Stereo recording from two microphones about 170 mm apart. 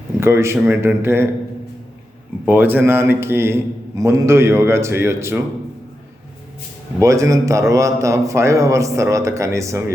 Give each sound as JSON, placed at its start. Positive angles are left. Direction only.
{"t": 0.2, "sound": "a man's voice", "side_deg": -15}
{"t": 2.5, "sound": "a man's voice", "side_deg": -10}
{"t": 7.0, "sound": "a man's voice", "side_deg": -20}